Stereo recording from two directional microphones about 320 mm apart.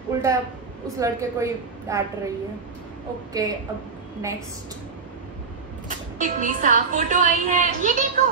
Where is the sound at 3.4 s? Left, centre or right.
Centre.